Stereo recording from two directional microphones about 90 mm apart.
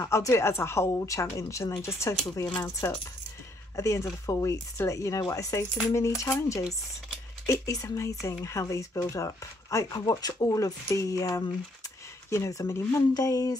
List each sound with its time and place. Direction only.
0.0 s speech: 35° left (ahead or behind)
2.6 s speech: 25° left (ahead or behind)
3.7 s speech: 35° left (ahead or behind)